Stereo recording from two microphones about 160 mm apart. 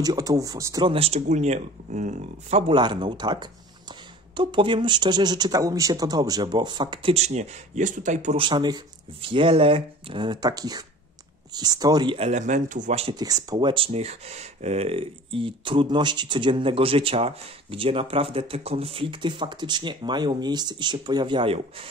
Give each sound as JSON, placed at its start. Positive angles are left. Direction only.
{"t": 0.0, "sound": "speech", "side_deg": -25}
{"t": 0.8, "sound": "speech", "side_deg": -35}
{"t": 2.7, "sound": "speech", "side_deg": -30}
{"t": 8.4, "sound": "speech", "side_deg": -30}
{"t": 12.2, "sound": "speech", "side_deg": -45}
{"t": 13.1, "sound": "speech", "side_deg": -25}